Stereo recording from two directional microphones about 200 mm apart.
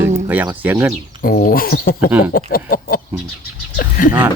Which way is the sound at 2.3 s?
45° left (ahead or behind).